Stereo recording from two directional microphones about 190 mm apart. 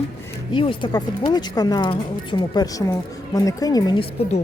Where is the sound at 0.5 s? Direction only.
25° left (ahead or behind).